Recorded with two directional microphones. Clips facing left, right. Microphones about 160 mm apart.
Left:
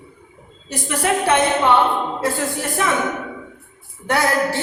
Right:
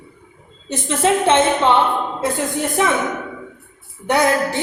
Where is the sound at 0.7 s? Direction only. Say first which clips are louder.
Right 3 dB; 25° right (ahead or behind).